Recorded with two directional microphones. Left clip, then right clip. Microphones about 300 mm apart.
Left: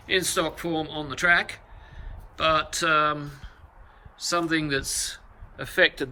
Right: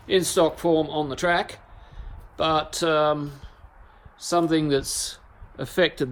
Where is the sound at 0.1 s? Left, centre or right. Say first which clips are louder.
Right 4 dB; centre.